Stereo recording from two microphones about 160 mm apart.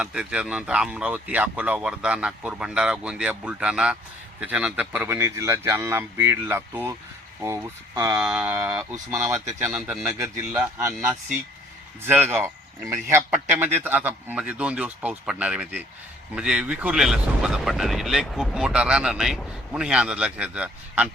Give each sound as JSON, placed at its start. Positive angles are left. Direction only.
{"t": 0.0, "sound": "a man's voice", "side_deg": -5}
{"t": 10.1, "sound": "speech", "side_deg": -15}
{"t": 12.0, "sound": "a man's voice", "side_deg": -10}